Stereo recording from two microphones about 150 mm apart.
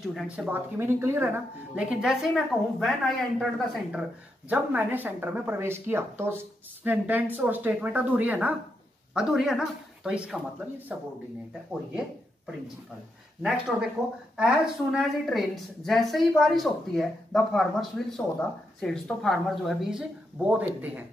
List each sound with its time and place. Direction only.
0.0 s a woman's voice: centre (ahead or behind)
0.5 s speech: 15° right (ahead or behind)
1.8 s a woman's voice: 5° right (ahead or behind)
13.4 s a woman's voice: 5° right (ahead or behind)